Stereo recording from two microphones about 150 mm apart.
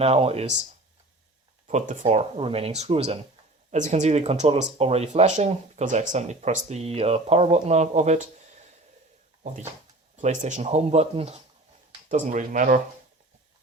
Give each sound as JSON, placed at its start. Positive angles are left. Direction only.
{"t": 0.0, "sound": "speech", "side_deg": -40}
{"t": 1.6, "sound": "speech", "side_deg": -55}
{"t": 10.2, "sound": "speech", "side_deg": -55}
{"t": 12.0, "sound": "speech", "side_deg": -55}